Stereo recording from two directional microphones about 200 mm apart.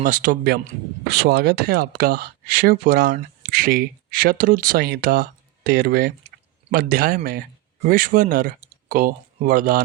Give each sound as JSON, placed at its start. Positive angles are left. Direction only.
{"t": 0.0, "sound": "speech", "side_deg": -40}